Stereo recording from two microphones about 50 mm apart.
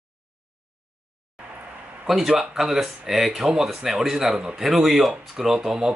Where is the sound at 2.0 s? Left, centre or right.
Centre.